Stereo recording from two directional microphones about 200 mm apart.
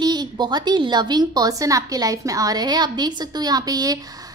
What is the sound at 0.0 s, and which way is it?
A woman's voice, 20° right (ahead or behind).